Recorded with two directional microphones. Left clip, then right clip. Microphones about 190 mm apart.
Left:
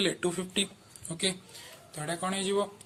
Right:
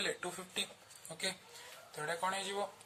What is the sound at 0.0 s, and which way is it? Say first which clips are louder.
Speech: left 9 dB; 30° left (ahead or behind).